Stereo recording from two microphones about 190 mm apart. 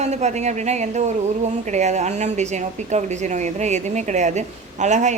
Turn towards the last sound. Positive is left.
turn(degrees=-40)  # may be behind; listen again after turning